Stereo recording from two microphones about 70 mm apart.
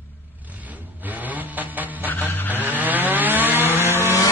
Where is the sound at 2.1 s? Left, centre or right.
Left.